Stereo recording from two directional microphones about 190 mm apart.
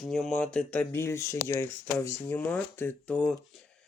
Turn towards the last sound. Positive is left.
turn(degrees=5)  # may be behind; listen again after turning